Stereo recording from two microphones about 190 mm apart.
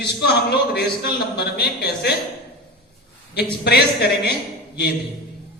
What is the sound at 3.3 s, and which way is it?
Speech, 60° left (ahead or behind).